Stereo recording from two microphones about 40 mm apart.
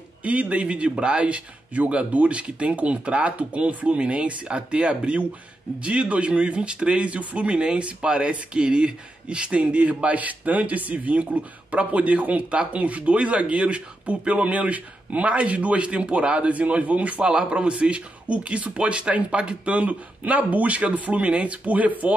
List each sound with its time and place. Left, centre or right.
0.2 s speech: right
17.2 s speech: right